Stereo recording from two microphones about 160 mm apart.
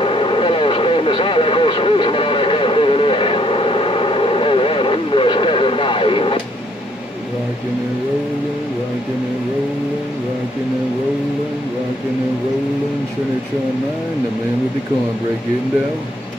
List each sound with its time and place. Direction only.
0.0 s vehicle: 35° left (ahead or behind)